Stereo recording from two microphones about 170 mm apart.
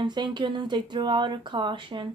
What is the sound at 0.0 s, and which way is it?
Speech, 25° right (ahead or behind).